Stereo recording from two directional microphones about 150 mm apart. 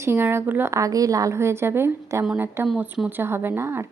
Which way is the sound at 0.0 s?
15° right (ahead or behind).